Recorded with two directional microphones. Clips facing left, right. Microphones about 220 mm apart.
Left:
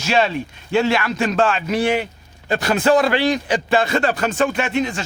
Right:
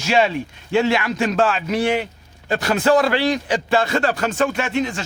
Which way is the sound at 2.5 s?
20° left (ahead or behind).